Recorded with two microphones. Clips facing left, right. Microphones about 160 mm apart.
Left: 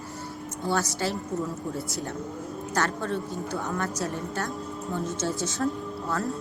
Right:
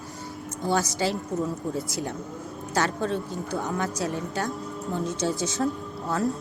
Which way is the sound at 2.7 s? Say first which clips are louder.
Right 2 dB; 15° right (ahead or behind).